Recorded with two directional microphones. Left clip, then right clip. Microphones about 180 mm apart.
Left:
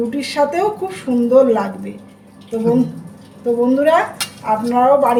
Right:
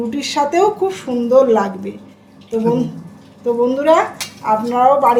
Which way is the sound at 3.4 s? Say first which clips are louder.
Even; 15° right (ahead or behind).